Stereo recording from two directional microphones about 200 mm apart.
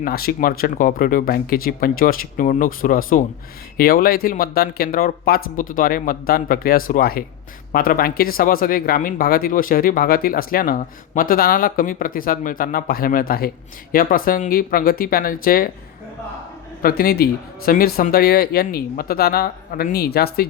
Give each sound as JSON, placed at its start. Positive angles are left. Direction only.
{"t": 0.0, "sound": "speech", "side_deg": 50}
{"t": 16.8, "sound": "speech", "side_deg": 50}